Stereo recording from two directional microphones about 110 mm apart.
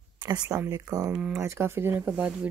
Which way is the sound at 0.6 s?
30° right (ahead or behind).